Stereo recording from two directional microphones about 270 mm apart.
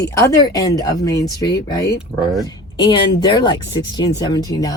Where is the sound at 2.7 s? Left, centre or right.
Centre.